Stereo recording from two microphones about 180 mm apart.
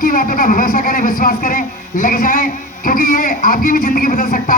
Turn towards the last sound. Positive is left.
turn(degrees=50)  # may be behind; listen again after turning